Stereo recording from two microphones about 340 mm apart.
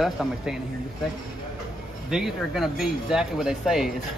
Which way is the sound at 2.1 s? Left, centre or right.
Centre.